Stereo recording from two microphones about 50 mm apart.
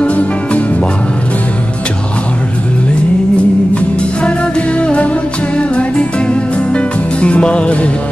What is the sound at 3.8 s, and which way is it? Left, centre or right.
Music, left.